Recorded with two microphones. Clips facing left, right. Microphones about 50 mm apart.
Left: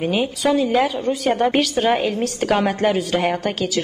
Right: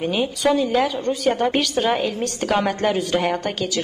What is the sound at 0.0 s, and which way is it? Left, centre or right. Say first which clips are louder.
A woman's voice: left 1 dB; centre.